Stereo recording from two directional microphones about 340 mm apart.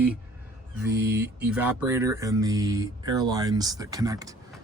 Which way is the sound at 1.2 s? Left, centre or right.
Centre.